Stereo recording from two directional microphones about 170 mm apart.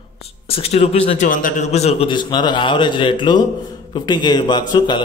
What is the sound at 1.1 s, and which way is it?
A man's voice, 50° left (ahead or behind).